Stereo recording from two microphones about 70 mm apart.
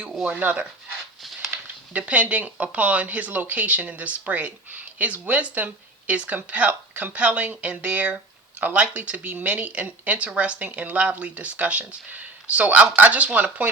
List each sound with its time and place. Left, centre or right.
0.0 s speech: centre